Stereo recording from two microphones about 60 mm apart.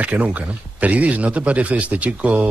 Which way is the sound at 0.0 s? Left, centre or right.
Right.